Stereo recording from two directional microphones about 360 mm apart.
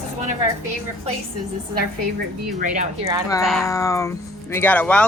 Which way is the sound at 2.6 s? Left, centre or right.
Centre.